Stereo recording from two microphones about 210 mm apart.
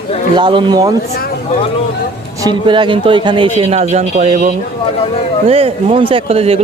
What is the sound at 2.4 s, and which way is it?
A man's voice, 20° right (ahead or behind).